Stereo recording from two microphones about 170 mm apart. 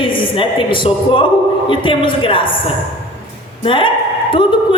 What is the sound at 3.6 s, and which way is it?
Speech, 30° left (ahead or behind).